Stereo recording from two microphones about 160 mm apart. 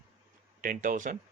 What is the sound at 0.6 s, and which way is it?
Speech, 55° right (ahead or behind).